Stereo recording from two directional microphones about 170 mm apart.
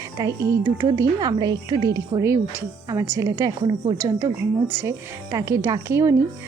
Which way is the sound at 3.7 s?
30° right (ahead or behind).